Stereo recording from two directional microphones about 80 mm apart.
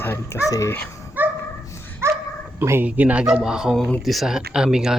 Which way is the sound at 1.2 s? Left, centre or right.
Right.